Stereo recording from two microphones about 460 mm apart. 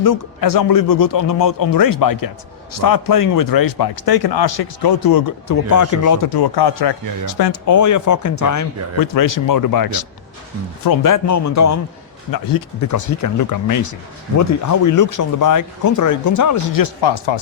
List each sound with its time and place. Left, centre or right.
0.0 s speech: left